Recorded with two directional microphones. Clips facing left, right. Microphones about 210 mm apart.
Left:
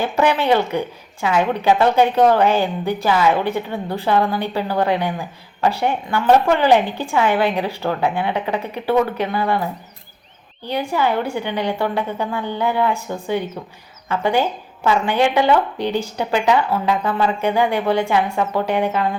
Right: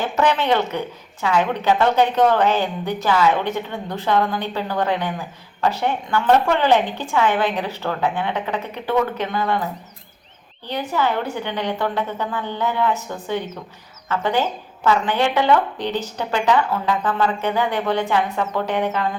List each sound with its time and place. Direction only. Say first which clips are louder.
0.0 s a woman's voice: left 2 dB; 10° left (ahead or behind)
10.7 s a woman's voice: left 2 dB; 10° left (ahead or behind)